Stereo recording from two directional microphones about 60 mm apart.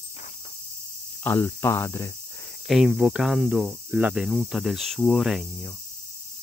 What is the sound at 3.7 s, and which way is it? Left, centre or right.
Cricket, right.